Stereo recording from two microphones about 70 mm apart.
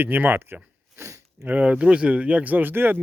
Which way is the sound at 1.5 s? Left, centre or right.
Right.